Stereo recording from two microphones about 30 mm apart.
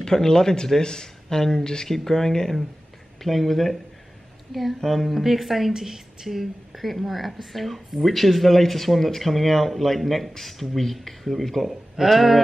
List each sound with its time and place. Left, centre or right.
0.0 s speech: centre
5.7 s a woman's voice: centre
6.7 s speech: centre